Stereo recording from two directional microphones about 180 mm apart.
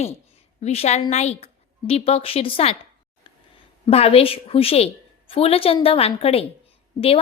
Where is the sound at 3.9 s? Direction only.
35° left (ahead or behind).